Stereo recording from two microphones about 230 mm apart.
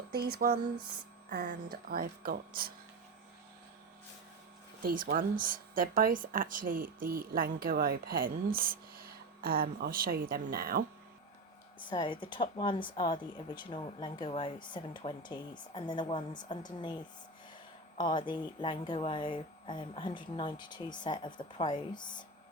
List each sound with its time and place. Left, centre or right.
0.1 s music: right
1.3 s a woman's voice: right
4.8 s a woman's voice: right
11.9 s speech: left